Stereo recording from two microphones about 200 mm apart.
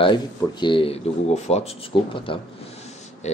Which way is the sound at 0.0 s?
25° left (ahead or behind).